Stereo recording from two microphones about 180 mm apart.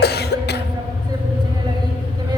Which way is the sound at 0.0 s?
65° left (ahead or behind).